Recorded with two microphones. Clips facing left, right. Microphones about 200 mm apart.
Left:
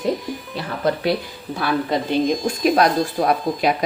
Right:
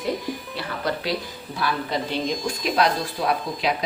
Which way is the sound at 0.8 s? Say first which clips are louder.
Left 7 dB; 50° left (ahead or behind).